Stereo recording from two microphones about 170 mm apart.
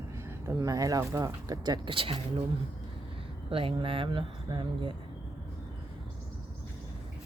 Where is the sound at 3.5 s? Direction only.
35° right (ahead or behind).